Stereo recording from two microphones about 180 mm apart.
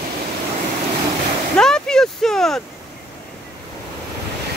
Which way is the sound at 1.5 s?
5° left (ahead or behind).